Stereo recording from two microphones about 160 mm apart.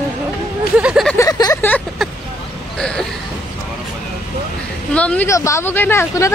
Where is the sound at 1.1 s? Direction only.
20° left (ahead or behind).